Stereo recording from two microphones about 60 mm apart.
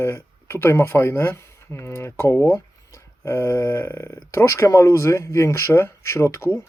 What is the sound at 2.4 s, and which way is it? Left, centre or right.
Speech, left.